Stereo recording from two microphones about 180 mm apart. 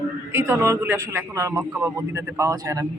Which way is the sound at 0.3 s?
15° right (ahead or behind).